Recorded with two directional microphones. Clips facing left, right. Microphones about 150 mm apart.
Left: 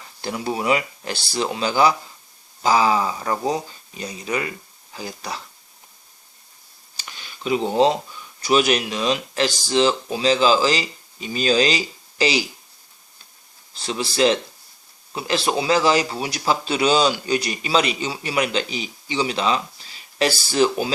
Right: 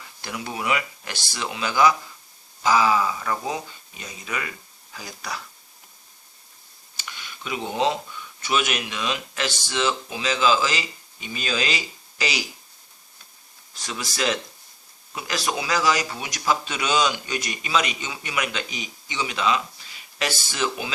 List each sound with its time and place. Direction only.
0.2 s speech: 30° left (ahead or behind)
6.9 s a sound: 35° left (ahead or behind)
8.4 s speech: 35° left (ahead or behind)
13.7 s speech: 30° left (ahead or behind)